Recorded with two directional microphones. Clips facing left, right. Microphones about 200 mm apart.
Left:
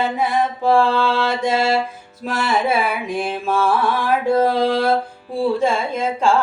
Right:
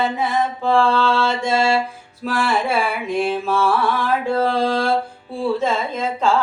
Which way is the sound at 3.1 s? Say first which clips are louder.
Right 3 dB; 15° left (ahead or behind).